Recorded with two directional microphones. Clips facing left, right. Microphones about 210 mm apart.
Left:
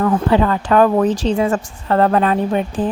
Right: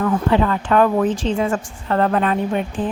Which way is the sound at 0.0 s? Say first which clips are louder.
Left 2 dB; 40° left (ahead or behind).